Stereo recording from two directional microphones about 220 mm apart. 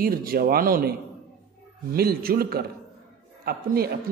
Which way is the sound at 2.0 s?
45° right (ahead or behind).